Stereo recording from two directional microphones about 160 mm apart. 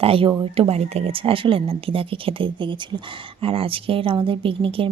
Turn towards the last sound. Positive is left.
turn(degrees=-35)  # may be behind; listen again after turning